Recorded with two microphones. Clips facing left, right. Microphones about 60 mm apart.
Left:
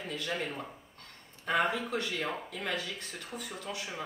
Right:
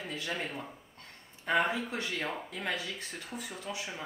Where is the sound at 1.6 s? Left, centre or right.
Right.